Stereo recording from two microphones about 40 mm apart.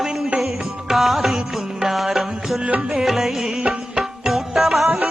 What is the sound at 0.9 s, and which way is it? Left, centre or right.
Music, centre.